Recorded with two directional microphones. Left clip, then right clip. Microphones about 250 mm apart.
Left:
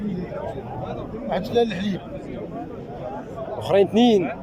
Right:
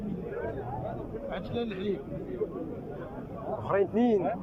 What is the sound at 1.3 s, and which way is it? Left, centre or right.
Speech, left.